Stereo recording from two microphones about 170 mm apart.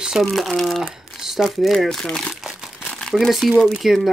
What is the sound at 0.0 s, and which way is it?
Speech, centre (ahead or behind).